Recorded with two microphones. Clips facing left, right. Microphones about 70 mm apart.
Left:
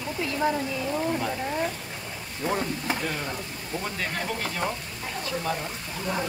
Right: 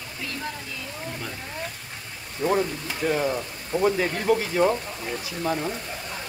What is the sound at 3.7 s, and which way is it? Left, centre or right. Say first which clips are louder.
Speech: right 9 dB; centre.